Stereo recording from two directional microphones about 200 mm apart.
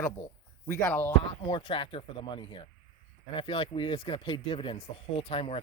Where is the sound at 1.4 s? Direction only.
25° left (ahead or behind).